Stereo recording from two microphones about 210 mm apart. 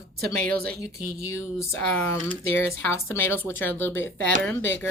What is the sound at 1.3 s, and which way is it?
Speech, 10° left (ahead or behind).